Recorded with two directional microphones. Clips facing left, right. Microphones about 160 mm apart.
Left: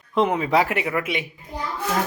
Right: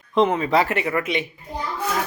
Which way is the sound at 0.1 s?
10° left (ahead or behind).